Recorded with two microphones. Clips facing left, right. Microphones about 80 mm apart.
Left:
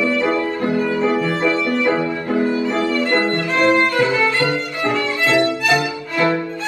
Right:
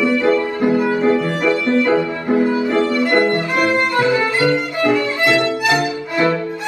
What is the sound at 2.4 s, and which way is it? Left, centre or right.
Violin, right.